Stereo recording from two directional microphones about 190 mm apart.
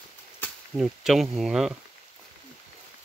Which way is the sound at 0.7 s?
Centre (ahead or behind).